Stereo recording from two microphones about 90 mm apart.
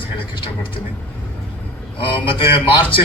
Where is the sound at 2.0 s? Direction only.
70° left (ahead or behind).